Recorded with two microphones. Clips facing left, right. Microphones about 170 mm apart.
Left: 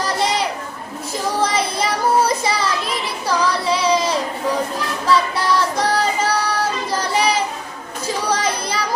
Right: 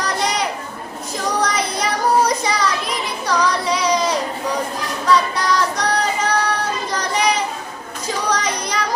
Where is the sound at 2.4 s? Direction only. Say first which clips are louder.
Even; 30° left (ahead or behind).